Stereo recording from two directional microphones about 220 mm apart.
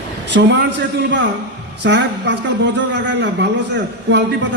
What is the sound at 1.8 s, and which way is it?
A man's voice, 50° right (ahead or behind).